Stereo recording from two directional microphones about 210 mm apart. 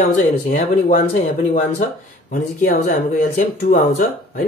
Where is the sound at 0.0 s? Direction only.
35° left (ahead or behind).